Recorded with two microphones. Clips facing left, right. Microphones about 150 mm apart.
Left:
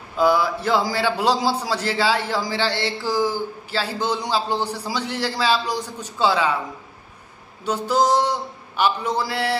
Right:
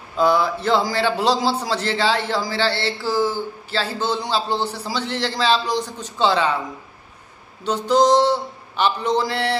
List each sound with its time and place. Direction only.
0.2 s a man's voice: 10° left (ahead or behind)
7.6 s a man's voice: 10° left (ahead or behind)